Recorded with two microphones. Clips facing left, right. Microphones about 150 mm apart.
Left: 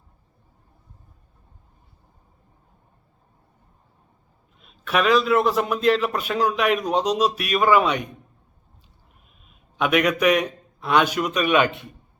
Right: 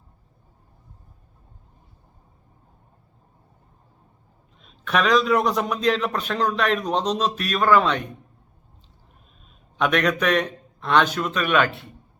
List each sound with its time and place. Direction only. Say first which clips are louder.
4.6 s a man's voice: left 1 dB; 5° left (ahead or behind)
9.7 s a man's voice: left 1 dB; 10° left (ahead or behind)